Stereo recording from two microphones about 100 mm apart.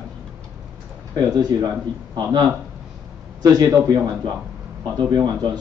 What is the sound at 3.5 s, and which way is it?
Speech, 40° right (ahead or behind).